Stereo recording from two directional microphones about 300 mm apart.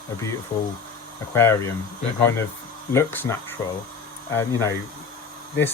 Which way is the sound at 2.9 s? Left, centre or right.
Centre.